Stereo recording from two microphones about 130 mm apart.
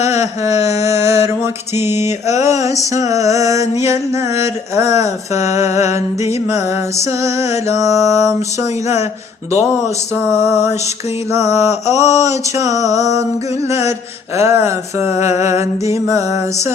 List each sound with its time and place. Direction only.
0.0 s a sound: 20° right (ahead or behind)
0.6 s mantra: 55° left (ahead or behind)
0.9 s mantra: 20° right (ahead or behind)
1.3 s music: 20° right (ahead or behind)
10.2 s music: 20° right (ahead or behind)
11.6 s mantra: 60° left (ahead or behind)
11.9 s music: 25° right (ahead or behind)